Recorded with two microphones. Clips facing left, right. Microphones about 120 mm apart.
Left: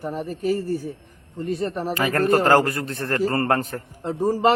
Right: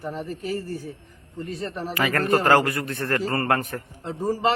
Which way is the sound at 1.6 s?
15° left (ahead or behind).